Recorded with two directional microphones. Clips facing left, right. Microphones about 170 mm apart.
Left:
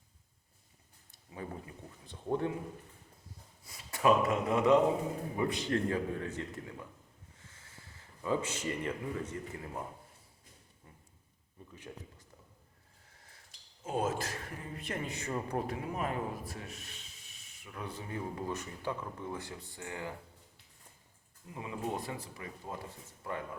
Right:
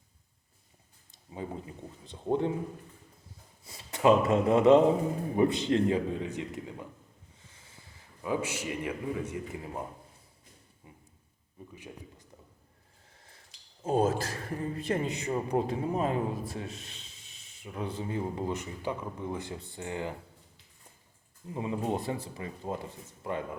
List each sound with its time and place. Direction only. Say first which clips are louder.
1.3 s speech: right 4 dB; 20° right (ahead or behind)
3.6 s speech: right 4 dB; 25° right (ahead or behind)
10.8 s speech: right 5 dB; 15° right (ahead or behind)
13.8 s a man's voice: right 7 dB; 35° right (ahead or behind)
15.1 s speech: right 6 dB; 15° right (ahead or behind)
21.4 s speech: right 6 dB; 30° right (ahead or behind)